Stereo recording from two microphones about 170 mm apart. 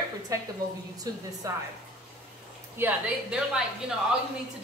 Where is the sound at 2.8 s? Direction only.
5° right (ahead or behind).